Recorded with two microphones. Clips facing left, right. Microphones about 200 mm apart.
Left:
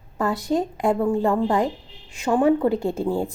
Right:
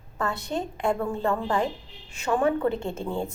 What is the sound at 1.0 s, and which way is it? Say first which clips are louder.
A woman's voice: left 6 dB; 30° left (ahead or behind).